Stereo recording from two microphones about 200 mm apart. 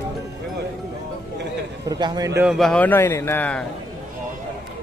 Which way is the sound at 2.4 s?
Centre (ahead or behind).